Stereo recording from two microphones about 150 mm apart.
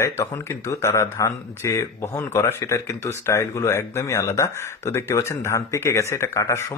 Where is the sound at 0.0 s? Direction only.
20° left (ahead or behind).